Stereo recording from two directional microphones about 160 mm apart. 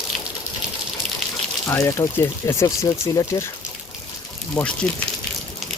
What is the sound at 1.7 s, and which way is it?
Speech, 15° left (ahead or behind).